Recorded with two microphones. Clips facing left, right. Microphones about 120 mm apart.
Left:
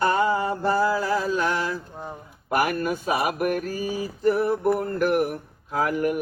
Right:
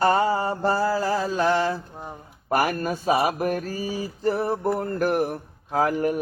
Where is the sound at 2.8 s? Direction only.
30° right (ahead or behind).